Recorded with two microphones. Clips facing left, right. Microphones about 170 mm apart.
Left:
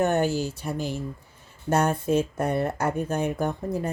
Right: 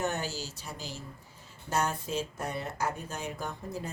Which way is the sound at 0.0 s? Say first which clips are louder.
Left 11 dB; 55° left (ahead or behind).